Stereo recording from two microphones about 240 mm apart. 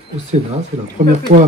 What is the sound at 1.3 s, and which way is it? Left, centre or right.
Speech, right.